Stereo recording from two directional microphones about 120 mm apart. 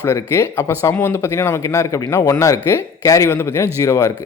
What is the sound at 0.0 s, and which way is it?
Speech, 20° left (ahead or behind).